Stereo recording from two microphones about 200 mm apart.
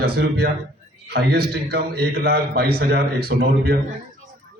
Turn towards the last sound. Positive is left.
turn(degrees=-50)  # may be behind; listen again after turning